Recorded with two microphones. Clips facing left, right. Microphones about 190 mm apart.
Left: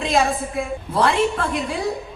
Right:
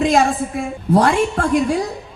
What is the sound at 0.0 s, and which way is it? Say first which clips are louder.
A man's voice: right 4 dB; 55° right (ahead or behind).